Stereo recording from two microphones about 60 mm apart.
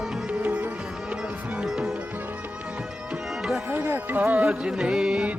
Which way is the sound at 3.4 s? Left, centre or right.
Centre.